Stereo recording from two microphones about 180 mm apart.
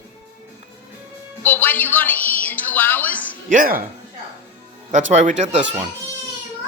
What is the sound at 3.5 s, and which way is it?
Speech, 50° right (ahead or behind).